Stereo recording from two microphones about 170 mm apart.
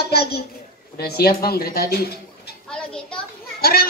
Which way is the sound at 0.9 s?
65° left (ahead or behind).